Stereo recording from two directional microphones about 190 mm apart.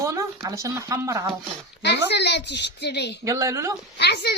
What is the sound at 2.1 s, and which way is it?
A child's voice, 65° left (ahead or behind).